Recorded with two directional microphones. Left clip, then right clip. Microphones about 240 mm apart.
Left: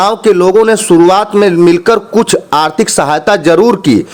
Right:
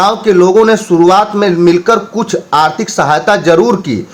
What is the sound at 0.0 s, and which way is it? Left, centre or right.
Speech, left.